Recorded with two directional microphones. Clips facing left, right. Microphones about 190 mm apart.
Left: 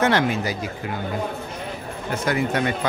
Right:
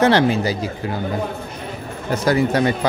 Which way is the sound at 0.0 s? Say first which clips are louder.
Right 5 dB; 30° right (ahead or behind).